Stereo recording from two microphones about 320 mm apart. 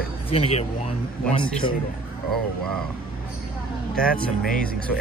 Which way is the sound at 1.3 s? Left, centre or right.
Centre.